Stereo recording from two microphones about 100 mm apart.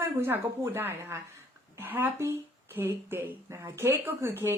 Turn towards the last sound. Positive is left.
turn(degrees=-25)  # may be behind; listen again after turning